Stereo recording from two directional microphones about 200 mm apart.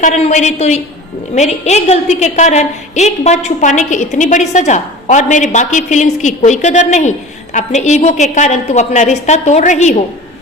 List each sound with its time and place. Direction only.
0.0 s a woman's voice: 35° left (ahead or behind)